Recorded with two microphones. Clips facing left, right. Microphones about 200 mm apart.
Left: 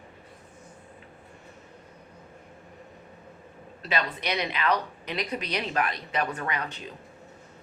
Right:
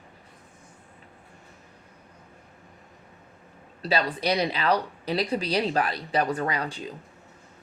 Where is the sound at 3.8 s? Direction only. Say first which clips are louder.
Right 4 dB; 35° right (ahead or behind).